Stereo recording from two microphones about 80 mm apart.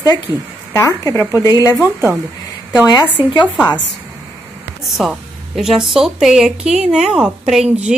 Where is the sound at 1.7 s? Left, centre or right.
Right.